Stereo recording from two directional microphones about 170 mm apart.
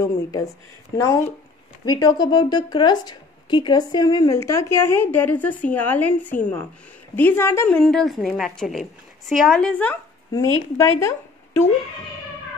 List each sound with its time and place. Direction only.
0.0 s a woman's voice: 20° left (ahead or behind)